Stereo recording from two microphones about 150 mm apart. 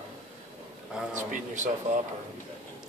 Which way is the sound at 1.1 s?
55° right (ahead or behind).